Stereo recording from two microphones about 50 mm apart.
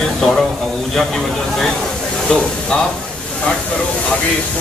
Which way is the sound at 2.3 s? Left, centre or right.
Centre.